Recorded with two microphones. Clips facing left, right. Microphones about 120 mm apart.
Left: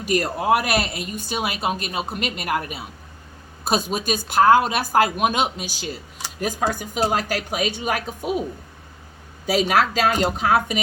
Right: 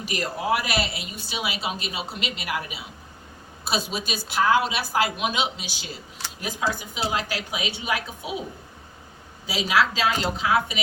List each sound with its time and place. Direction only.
0.0 s speech: 50° left (ahead or behind)
9.5 s speech: 50° left (ahead or behind)